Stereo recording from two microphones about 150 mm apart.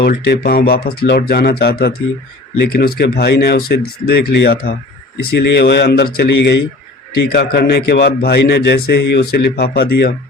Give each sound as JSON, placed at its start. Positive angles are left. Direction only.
{"t": 0.0, "sound": "a man's voice", "side_deg": 90}